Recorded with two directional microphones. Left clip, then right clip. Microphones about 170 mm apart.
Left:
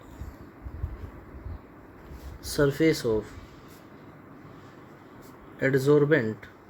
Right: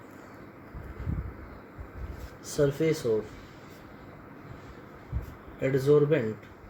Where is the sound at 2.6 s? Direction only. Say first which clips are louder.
Left 3 dB; 70° left (ahead or behind).